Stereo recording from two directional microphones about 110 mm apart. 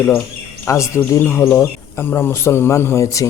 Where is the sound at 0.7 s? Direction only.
25° left (ahead or behind).